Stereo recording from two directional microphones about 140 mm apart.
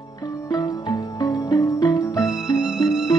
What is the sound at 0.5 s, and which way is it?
Music, 30° left (ahead or behind).